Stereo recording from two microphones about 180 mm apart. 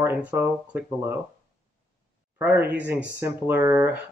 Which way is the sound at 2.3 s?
10° right (ahead or behind).